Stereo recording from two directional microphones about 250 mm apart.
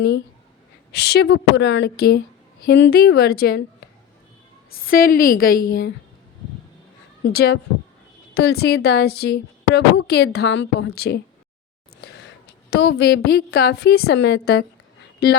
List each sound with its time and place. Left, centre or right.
0.9 s a woman's voice: left
4.9 s a woman's voice: left
7.2 s a woman's voice: left
12.0 s a sound: left
12.7 s a woman's voice: left